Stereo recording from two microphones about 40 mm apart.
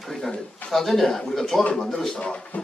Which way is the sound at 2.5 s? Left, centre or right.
Left.